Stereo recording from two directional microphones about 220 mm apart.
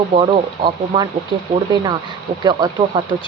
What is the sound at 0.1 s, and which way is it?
Speech, 20° right (ahead or behind).